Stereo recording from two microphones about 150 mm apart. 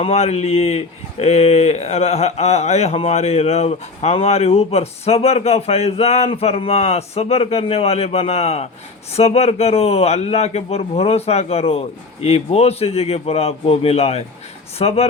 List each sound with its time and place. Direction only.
0.0 s speech: 45° left (ahead or behind)